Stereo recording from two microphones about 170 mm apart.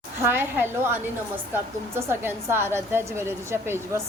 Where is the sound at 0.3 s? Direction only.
10° right (ahead or behind).